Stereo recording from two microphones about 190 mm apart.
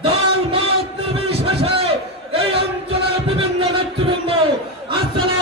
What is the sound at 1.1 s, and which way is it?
Crowd, 30° right (ahead or behind).